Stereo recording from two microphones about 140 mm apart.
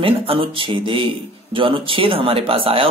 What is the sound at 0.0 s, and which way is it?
Speech, 40° right (ahead or behind).